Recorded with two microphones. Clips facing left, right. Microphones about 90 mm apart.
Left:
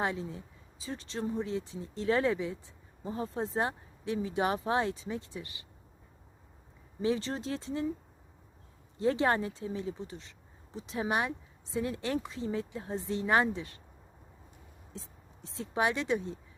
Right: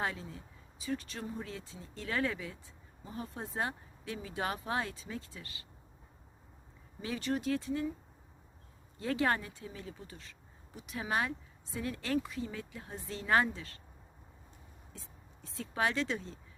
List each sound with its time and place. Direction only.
0.0 s speech: 25° left (ahead or behind)
7.0 s speech: 25° left (ahead or behind)
9.0 s speech: 25° left (ahead or behind)
14.9 s speech: 25° left (ahead or behind)